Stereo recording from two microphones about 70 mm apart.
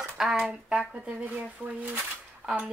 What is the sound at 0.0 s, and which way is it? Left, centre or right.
Speech, centre.